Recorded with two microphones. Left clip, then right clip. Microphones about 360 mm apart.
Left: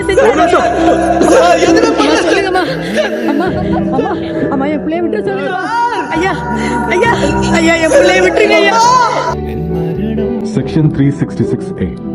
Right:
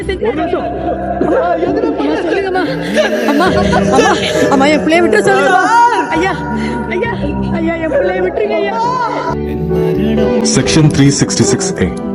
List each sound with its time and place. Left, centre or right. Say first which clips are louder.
0.3 s chatter: left 4 dB; left
0.9 s chatter: left 3 dB; left
3.0 s speech: right 3 dB; centre; by 4.4 s right
4.5 s speech: right 6 dB; right; by 5.9 s centre
7.5 s speech: left 6 dB; left; by 9.0 s centre